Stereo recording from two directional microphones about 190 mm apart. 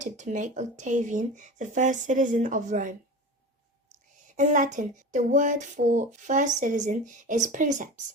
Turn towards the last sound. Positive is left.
turn(degrees=-40)  # may be behind; listen again after turning